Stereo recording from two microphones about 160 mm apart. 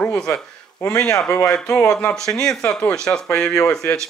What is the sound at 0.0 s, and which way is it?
A man's voice, 5° left (ahead or behind).